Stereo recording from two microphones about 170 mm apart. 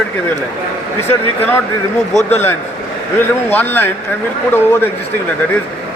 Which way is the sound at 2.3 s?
15° left (ahead or behind).